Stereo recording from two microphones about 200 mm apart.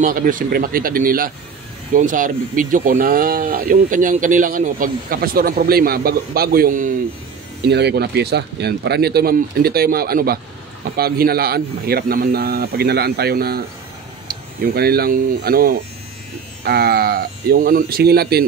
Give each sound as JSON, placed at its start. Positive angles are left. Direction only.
{"t": 0.0, "sound": "speech", "side_deg": -45}
{"t": 7.6, "sound": "speech", "side_deg": -55}